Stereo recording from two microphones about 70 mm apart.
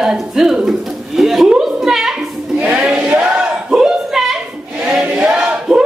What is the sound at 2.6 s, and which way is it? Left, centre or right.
Choir, right.